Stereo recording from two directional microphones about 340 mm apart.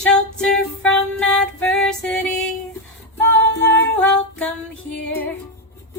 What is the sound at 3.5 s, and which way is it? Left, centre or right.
Music, left.